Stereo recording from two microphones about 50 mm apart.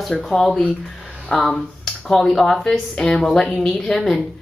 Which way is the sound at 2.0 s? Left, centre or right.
Centre.